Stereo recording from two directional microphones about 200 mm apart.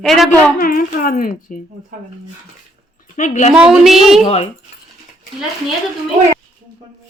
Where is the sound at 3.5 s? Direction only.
5° right (ahead or behind).